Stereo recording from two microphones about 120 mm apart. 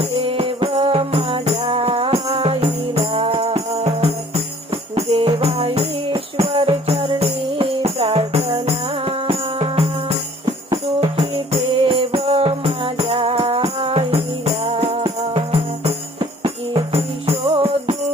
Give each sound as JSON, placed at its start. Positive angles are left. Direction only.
{"t": 0.0, "sound": "music", "side_deg": -55}
{"t": 11.8, "sound": "music", "side_deg": -50}